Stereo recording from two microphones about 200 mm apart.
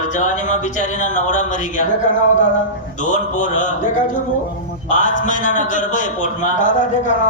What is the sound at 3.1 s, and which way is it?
A man's voice, 40° left (ahead or behind).